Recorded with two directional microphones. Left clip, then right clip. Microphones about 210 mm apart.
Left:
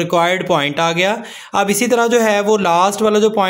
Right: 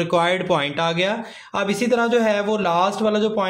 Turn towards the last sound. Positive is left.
turn(degrees=35)  # may be behind; listen again after turning